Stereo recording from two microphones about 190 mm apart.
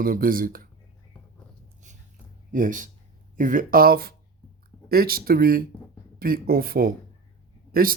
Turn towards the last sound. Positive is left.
turn(degrees=-50)  # may be behind; listen again after turning